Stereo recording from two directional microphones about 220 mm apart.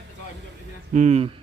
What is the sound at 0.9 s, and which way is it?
Speech, 30° right (ahead or behind).